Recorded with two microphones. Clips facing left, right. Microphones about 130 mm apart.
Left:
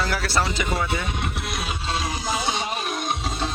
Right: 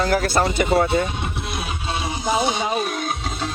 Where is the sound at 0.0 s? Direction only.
45° right (ahead or behind).